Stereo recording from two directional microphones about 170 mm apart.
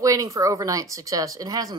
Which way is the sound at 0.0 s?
20° right (ahead or behind).